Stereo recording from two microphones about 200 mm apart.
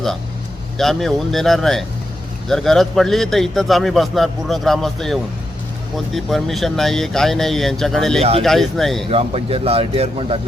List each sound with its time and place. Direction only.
0.8 s a man's voice: centre (ahead or behind)
8.2 s speech: 30° right (ahead or behind)
8.4 s a man's voice: centre (ahead or behind)
9.0 s speech: 30° right (ahead or behind)